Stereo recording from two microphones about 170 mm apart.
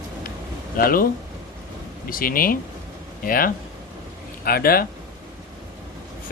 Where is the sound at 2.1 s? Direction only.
55° left (ahead or behind).